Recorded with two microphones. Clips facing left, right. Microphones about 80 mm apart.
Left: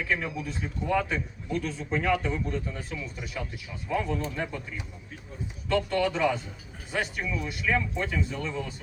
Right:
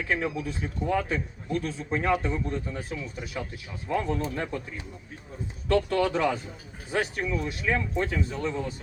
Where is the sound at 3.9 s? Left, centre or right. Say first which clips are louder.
Right 1 dB; right.